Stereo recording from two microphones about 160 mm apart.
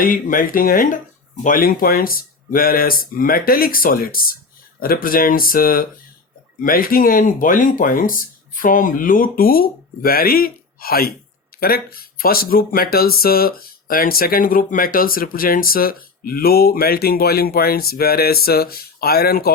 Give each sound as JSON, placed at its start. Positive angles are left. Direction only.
{"t": 0.0, "sound": "speech", "side_deg": 60}